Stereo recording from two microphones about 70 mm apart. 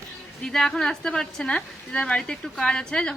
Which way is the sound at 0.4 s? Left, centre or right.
Centre.